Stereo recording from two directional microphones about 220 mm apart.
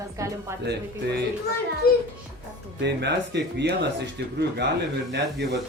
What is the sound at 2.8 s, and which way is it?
Speech, 50° right (ahead or behind).